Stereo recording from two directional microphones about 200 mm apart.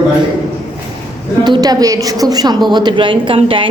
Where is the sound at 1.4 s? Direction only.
20° right (ahead or behind).